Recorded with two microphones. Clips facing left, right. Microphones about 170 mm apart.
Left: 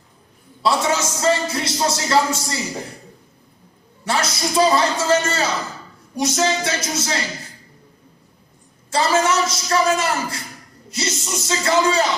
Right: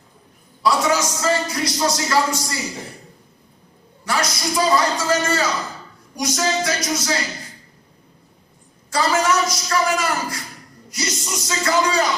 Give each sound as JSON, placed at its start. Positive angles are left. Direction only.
{"t": 0.6, "sound": "a man's voice", "side_deg": 25}
{"t": 4.0, "sound": "a man's voice", "side_deg": 25}
{"t": 8.9, "sound": "a man's voice", "side_deg": 25}